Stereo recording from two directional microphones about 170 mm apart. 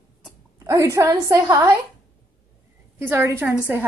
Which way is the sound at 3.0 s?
15° right (ahead or behind).